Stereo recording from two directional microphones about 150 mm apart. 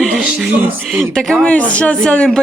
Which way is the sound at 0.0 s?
5° right (ahead or behind).